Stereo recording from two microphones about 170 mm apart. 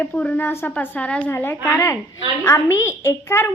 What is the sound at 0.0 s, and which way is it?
A woman's voice, 10° left (ahead or behind).